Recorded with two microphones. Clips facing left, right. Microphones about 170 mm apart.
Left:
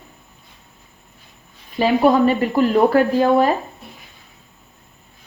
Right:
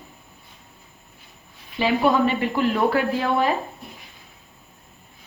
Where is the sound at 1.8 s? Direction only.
40° left (ahead or behind).